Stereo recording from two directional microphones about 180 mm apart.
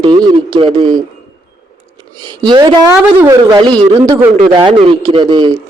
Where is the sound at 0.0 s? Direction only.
25° right (ahead or behind).